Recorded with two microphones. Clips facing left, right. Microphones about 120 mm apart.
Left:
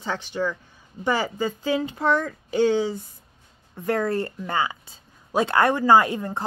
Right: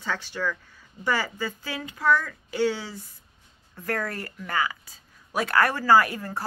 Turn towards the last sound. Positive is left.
turn(degrees=20)  # may be behind; listen again after turning